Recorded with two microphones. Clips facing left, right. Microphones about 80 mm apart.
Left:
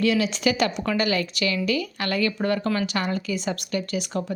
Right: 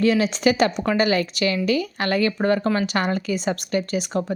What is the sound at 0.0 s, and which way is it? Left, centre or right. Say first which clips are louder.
Speech: right 3 dB; right.